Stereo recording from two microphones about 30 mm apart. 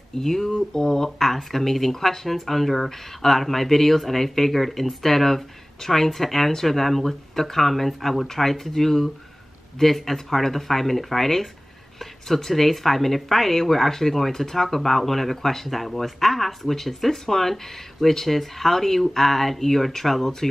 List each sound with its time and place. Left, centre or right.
0.2 s speech: centre